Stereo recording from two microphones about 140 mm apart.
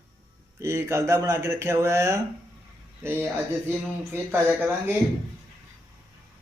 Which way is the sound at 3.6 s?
15° right (ahead or behind).